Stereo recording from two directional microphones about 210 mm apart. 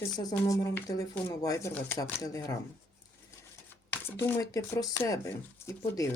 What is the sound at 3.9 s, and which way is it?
Speech, 10° left (ahead or behind).